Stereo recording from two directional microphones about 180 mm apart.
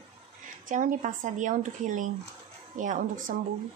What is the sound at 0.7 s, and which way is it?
A woman's voice, 45° right (ahead or behind).